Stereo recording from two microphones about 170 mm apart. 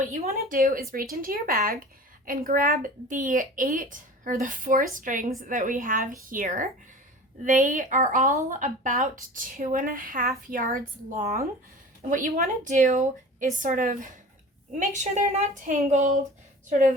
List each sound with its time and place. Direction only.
0.2 s a woman's voice: 45° right (ahead or behind); by 11.4 s 60° right (ahead or behind)
12.0 s a woman's voice: 45° right (ahead or behind)